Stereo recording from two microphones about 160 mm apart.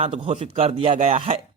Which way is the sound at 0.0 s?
40° right (ahead or behind).